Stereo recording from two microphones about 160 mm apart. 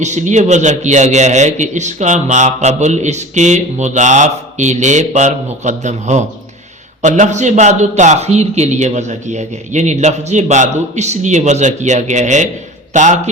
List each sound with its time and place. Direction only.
0.0 s a man's voice: 50° right (ahead or behind)